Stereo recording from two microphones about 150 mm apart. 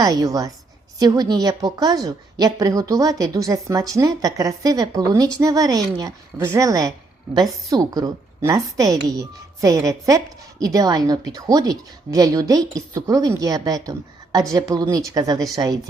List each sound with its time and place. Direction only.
0.0 s a woman's voice: 25° right (ahead or behind)